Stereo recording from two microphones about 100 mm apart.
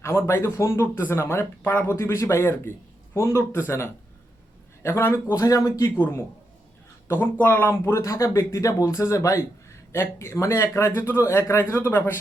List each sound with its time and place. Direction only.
0.0 s speech: 30° left (ahead or behind)